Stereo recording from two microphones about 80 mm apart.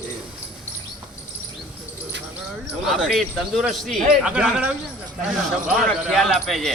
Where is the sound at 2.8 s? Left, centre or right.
Centre.